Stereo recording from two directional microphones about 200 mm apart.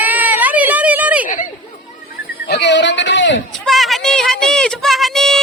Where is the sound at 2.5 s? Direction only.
60° left (ahead or behind).